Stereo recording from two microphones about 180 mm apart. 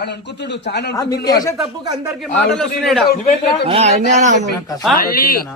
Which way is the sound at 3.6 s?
35° right (ahead or behind).